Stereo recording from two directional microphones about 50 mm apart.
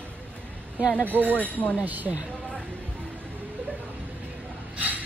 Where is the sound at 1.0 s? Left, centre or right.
Right.